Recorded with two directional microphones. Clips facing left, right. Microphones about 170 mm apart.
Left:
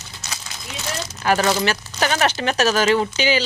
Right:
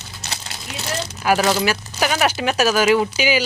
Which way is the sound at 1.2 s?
5° right (ahead or behind).